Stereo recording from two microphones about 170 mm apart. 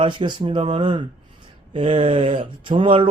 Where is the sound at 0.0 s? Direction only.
30° right (ahead or behind).